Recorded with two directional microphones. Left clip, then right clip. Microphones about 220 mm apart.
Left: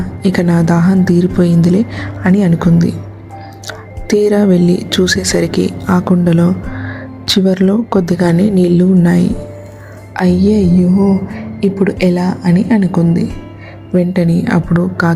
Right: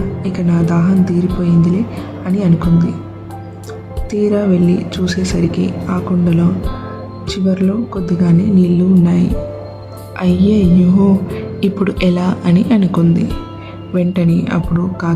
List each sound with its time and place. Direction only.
0.2 s speech: 25° left (ahead or behind)
10.2 s a woman's voice: 10° left (ahead or behind)